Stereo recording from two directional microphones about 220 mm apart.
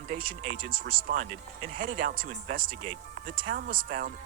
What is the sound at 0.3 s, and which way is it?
Speech, 40° right (ahead or behind).